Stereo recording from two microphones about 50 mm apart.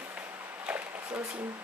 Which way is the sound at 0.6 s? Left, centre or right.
Right.